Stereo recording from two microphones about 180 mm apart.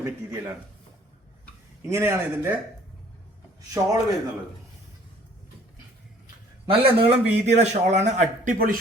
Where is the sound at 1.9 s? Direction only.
15° right (ahead or behind).